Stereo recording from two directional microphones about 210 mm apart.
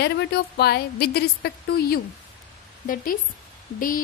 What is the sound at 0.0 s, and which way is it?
A woman's voice, 50° left (ahead or behind).